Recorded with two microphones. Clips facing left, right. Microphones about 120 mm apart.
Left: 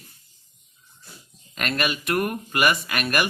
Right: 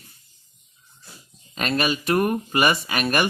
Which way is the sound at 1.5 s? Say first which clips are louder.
Right 3 dB; 35° right (ahead or behind).